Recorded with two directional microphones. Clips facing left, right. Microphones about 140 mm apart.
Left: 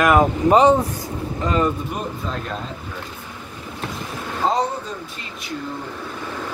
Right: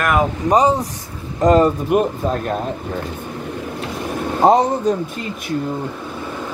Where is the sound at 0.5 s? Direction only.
10° right (ahead or behind).